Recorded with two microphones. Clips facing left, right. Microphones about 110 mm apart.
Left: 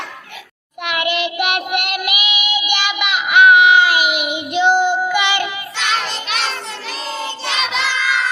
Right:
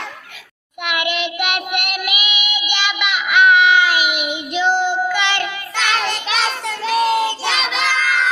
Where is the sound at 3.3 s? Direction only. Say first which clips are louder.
Left 2 dB; 10° left (ahead or behind).